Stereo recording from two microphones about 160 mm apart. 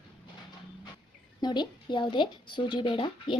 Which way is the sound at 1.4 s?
30° left (ahead or behind).